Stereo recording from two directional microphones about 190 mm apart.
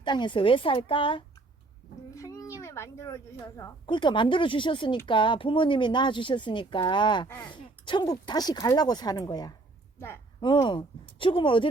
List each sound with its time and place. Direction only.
0.0 s speech: 25° left (ahead or behind)
2.0 s speech: 15° left (ahead or behind)
7.3 s speech: 10° left (ahead or behind)
7.5 s speech: 25° left (ahead or behind)